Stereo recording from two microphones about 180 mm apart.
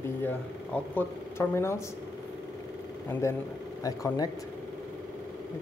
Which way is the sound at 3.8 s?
20° left (ahead or behind).